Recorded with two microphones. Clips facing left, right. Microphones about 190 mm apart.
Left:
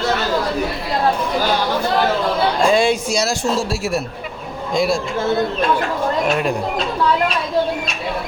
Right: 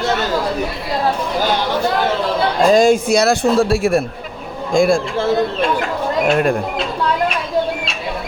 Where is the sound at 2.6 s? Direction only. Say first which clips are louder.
Right 5 dB; 40° right (ahead or behind).